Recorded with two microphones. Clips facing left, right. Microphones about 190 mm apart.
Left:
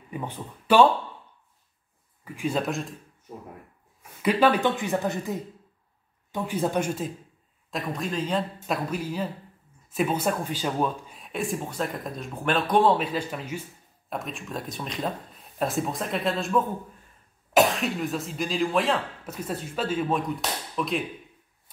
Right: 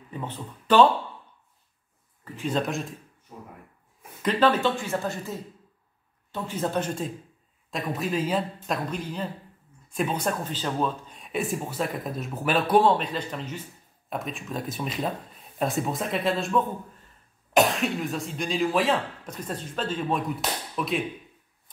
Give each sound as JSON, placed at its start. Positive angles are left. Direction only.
{"t": 0.1, "sound": "speech", "side_deg": 10}
{"t": 2.2, "sound": "speech", "side_deg": 10}
{"t": 4.2, "sound": "speech", "side_deg": 10}
{"t": 7.7, "sound": "speech", "side_deg": 0}
{"t": 8.6, "sound": "speech", "side_deg": 5}
{"t": 11.1, "sound": "speech", "side_deg": 0}